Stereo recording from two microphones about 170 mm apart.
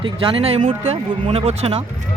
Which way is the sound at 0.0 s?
30° right (ahead or behind).